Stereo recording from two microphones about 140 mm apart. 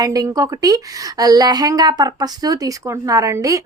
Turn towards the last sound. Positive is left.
turn(degrees=-25)  # may be behind; listen again after turning